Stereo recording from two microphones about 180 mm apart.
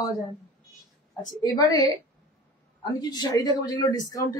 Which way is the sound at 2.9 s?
20° left (ahead or behind).